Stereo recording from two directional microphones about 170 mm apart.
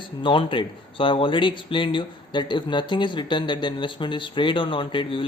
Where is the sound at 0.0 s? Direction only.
30° left (ahead or behind).